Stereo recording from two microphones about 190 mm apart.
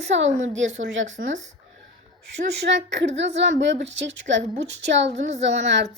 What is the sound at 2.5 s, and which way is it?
Speech, 65° right (ahead or behind).